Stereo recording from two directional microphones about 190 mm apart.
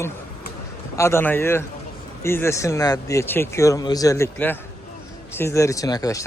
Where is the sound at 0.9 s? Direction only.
15° left (ahead or behind).